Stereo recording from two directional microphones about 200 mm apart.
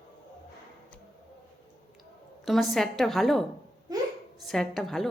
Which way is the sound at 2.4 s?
Centre (ahead or behind).